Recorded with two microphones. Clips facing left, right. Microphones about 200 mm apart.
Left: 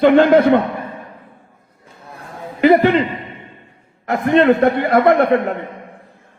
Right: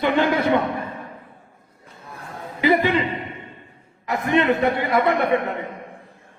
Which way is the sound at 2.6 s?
70° left (ahead or behind).